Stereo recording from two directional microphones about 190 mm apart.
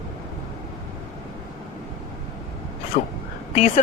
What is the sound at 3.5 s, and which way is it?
Speech, 35° left (ahead or behind).